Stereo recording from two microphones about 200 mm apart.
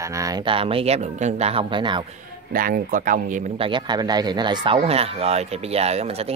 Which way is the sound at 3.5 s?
25° right (ahead or behind).